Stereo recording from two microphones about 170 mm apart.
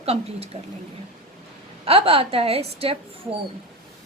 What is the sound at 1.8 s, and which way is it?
Speech, 35° right (ahead or behind).